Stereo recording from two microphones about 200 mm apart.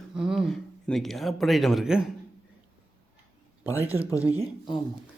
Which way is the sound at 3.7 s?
10° right (ahead or behind).